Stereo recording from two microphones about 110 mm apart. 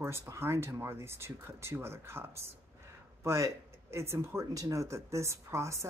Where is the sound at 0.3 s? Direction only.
25° right (ahead or behind).